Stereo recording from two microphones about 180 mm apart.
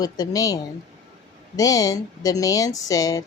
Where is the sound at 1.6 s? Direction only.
20° left (ahead or behind).